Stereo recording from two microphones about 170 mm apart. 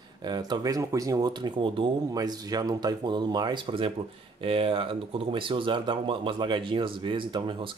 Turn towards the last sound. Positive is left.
turn(degrees=-30)  # may be behind; listen again after turning